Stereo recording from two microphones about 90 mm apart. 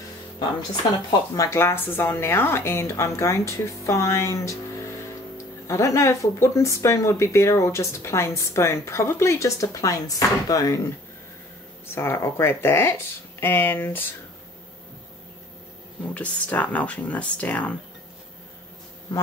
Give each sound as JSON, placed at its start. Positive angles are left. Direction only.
{"t": 1.3, "sound": "speech", "side_deg": 40}
{"t": 1.6, "sound": "speech", "side_deg": 25}
{"t": 5.7, "sound": "speech", "side_deg": 35}
{"t": 11.9, "sound": "speech", "side_deg": 30}
{"t": 16.1, "sound": "speech", "side_deg": 15}